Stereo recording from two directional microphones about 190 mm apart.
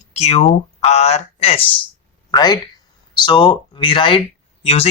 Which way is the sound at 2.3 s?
20° left (ahead or behind).